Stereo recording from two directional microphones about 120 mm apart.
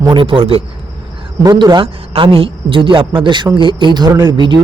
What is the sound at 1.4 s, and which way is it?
Speech, 35° right (ahead or behind).